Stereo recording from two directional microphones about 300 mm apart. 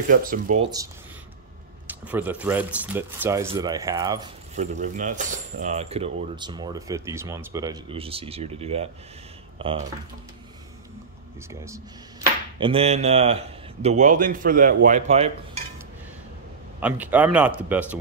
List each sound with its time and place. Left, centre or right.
0.1 s a man's voice: right
1.9 s speech: centre
12.5 s a man's voice: centre
16.8 s speech: centre